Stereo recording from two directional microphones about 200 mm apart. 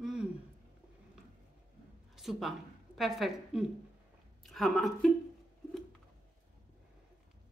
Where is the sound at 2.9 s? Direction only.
Centre (ahead or behind).